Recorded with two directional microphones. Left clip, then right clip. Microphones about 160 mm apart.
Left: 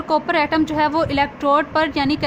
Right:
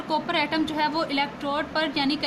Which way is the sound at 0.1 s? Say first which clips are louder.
Left 7 dB; 55° left (ahead or behind).